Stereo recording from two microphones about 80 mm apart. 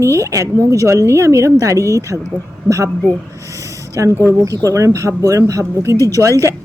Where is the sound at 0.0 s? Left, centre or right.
Right.